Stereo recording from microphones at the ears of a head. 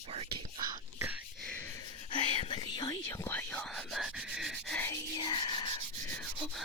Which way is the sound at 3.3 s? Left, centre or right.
Centre.